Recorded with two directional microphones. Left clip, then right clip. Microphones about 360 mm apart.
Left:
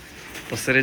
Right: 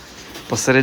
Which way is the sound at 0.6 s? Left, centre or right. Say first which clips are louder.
Right 4 dB; centre.